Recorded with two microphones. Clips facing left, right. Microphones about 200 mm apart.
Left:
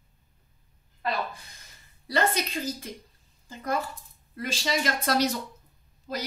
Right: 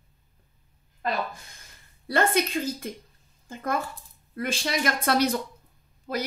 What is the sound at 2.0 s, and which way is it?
Speech, 55° right (ahead or behind).